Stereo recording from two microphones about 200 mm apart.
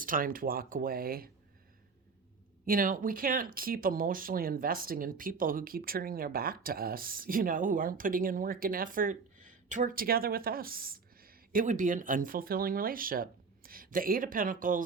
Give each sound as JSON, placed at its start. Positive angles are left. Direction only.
{"t": 0.0, "sound": "speech", "side_deg": -45}
{"t": 2.6, "sound": "speech", "side_deg": -45}